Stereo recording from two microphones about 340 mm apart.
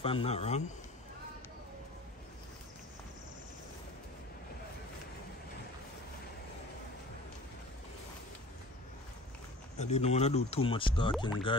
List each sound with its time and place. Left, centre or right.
0.0 s speech: centre
9.9 s speech: centre